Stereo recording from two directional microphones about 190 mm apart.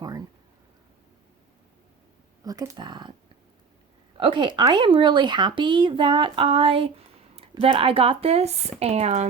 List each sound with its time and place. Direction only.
0.0 s speech: 20° right (ahead or behind)
2.4 s speech: 20° right (ahead or behind)
4.2 s speech: 25° right (ahead or behind)